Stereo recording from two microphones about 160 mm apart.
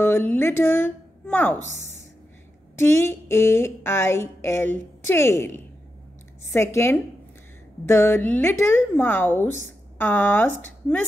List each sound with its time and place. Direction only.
0.0 s speech: 10° left (ahead or behind)
2.8 s a woman's voice: 15° left (ahead or behind)